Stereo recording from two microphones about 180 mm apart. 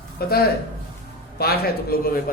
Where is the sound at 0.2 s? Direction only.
55° left (ahead or behind).